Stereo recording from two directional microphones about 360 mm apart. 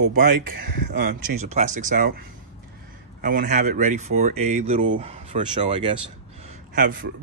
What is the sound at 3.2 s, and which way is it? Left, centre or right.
Speech, right.